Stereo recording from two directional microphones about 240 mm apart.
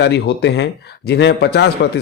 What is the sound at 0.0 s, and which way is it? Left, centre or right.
Speech, left.